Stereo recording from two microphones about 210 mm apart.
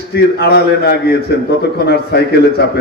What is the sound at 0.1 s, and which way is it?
A man's voice, 50° left (ahead or behind).